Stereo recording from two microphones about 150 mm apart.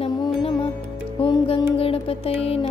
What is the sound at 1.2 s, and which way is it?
Music, 35° left (ahead or behind).